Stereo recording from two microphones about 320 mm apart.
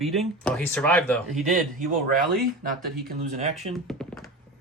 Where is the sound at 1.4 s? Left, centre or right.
Right.